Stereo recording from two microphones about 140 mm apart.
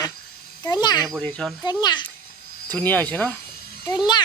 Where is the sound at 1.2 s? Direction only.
10° left (ahead or behind).